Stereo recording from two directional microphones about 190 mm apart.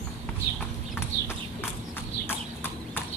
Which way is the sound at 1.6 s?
10° left (ahead or behind).